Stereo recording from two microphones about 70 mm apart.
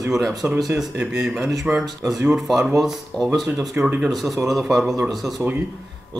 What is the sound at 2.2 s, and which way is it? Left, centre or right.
Speech, centre.